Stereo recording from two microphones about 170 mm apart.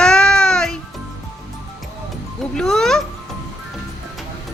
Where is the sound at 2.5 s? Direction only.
5° left (ahead or behind).